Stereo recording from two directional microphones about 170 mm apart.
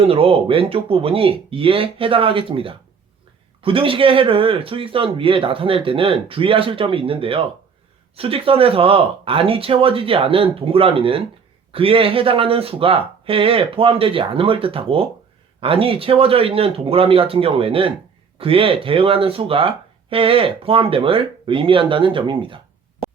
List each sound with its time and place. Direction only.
0.0 s speech: 35° right (ahead or behind)